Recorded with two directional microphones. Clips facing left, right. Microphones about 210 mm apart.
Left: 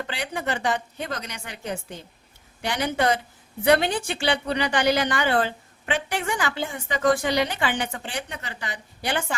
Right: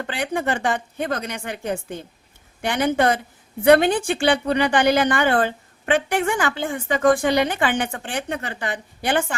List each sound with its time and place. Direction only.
0.1 s a woman's voice: 55° right (ahead or behind)